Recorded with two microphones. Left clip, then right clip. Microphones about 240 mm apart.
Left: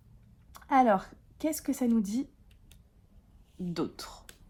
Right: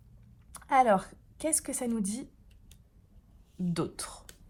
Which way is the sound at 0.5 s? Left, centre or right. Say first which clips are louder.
Even; right.